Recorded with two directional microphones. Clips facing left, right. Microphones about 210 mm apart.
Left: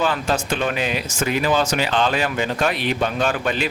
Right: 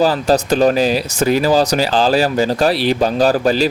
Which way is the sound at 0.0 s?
35° right (ahead or behind).